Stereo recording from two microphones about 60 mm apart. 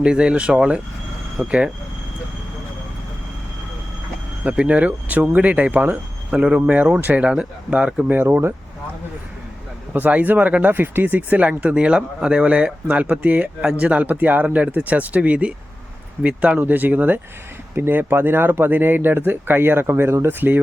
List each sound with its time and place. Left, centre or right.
0.0 s speech: centre
4.4 s speech: centre
6.3 s speech: centre
7.3 s speech: centre
8.1 s speech: right
9.9 s speech: right
17.7 s speech: right